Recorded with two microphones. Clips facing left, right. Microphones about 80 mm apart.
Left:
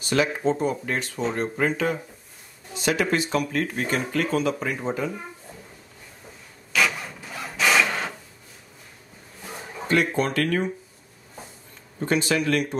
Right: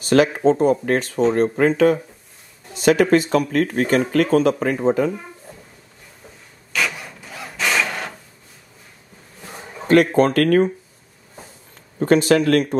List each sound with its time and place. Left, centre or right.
0.0 s speech: right
2.8 s speech: right
6.7 s a sound: centre
9.8 s speech: right
12.0 s speech: right